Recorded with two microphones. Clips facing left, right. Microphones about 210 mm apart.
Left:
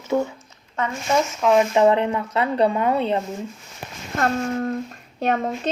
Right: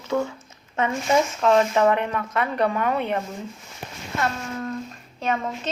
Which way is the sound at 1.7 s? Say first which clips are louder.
Left 3 dB; 25° left (ahead or behind).